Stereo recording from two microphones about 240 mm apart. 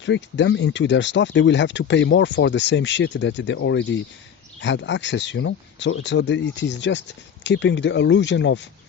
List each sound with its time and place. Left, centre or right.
0.0 s speech: left